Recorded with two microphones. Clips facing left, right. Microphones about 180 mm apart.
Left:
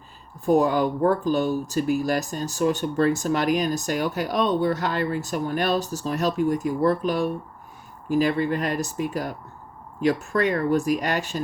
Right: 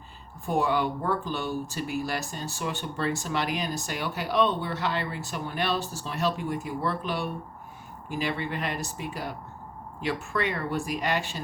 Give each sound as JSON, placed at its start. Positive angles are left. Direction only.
{"t": 0.4, "sound": "speech", "side_deg": 40}